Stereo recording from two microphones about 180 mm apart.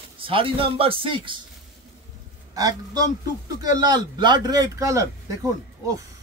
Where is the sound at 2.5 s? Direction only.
20° right (ahead or behind).